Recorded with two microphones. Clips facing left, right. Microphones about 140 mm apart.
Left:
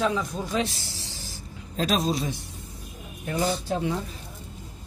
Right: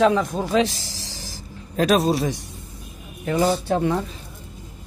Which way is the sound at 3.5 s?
60° right (ahead or behind).